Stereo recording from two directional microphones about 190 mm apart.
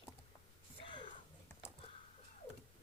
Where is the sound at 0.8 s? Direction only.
25° left (ahead or behind).